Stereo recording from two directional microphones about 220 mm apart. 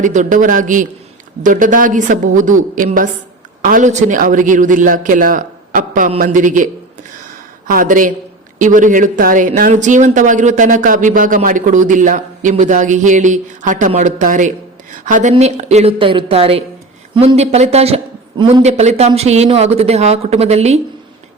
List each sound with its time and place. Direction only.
0.0 s speech: 35° right (ahead or behind)
7.7 s a man's voice: 40° right (ahead or behind)